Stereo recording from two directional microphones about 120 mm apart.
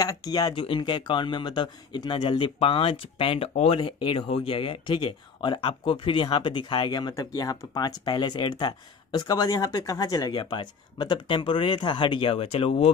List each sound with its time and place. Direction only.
0.0 s speech: 30° left (ahead or behind)
0.6 s a man's voice: 45° left (ahead or behind)